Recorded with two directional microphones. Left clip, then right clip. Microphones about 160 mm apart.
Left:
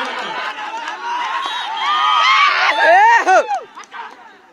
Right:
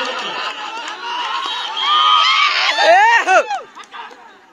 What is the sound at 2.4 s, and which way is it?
Screaming, 45° left (ahead or behind).